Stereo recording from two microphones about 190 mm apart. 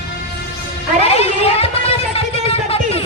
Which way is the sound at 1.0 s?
35° left (ahead or behind).